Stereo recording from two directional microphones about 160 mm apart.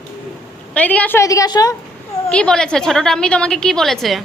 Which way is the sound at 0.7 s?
10° left (ahead or behind).